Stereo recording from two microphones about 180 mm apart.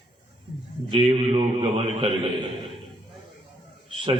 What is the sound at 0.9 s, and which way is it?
Speech, 30° right (ahead or behind).